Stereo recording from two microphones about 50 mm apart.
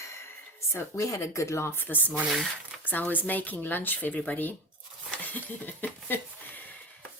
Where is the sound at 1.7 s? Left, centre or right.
Left.